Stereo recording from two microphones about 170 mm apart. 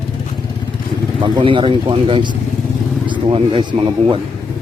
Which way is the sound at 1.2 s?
30° right (ahead or behind).